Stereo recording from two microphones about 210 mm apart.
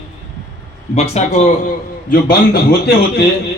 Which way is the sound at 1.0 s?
30° left (ahead or behind).